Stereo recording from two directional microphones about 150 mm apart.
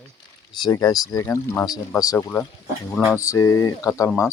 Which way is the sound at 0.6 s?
25° left (ahead or behind).